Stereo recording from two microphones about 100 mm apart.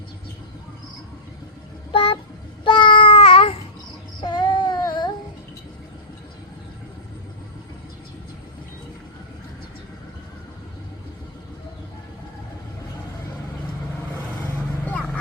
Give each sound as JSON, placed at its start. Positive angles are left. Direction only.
{"t": 1.9, "sound": "a sound", "side_deg": 70}
{"t": 2.6, "sound": "child singing", "side_deg": 55}
{"t": 4.2, "sound": "child singing", "side_deg": 45}
{"t": 14.8, "sound": "dog", "side_deg": 15}